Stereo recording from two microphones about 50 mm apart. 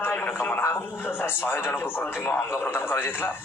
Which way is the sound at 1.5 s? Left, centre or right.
Left.